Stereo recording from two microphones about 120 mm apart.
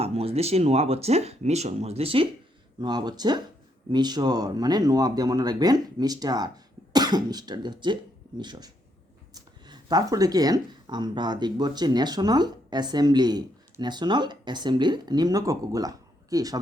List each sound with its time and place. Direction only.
0.0 s speech: 55° right (ahead or behind)
2.8 s speech: 35° right (ahead or behind)